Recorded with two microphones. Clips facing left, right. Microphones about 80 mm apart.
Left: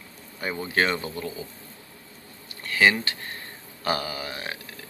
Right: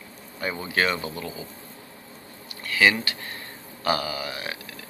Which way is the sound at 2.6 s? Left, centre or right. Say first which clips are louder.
Even; left.